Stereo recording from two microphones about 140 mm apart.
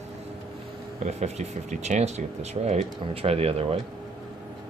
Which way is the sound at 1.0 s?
55° right (ahead or behind).